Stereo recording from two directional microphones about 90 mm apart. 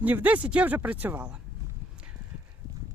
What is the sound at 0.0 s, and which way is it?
Speech, 20° right (ahead or behind).